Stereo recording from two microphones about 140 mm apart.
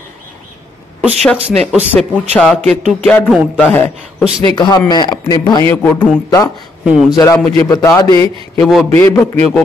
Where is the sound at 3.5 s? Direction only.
15° left (ahead or behind).